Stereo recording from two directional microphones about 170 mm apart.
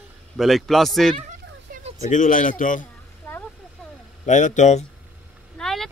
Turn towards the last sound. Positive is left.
turn(degrees=0)  # may be behind; listen again after turning